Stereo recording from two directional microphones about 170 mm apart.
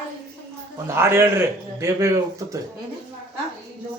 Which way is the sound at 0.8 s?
15° right (ahead or behind).